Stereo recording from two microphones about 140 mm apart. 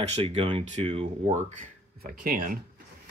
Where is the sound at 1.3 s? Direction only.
60° right (ahead or behind); by 2.5 s 85° right.